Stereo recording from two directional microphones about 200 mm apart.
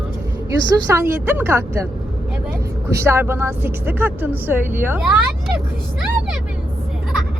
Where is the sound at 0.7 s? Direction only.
15° right (ahead or behind).